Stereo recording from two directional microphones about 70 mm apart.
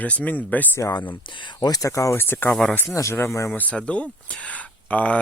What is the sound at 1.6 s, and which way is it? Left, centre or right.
Speech, left.